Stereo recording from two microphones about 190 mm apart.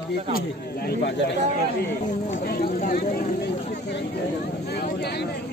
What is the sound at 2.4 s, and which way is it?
Speech, 50° left (ahead or behind).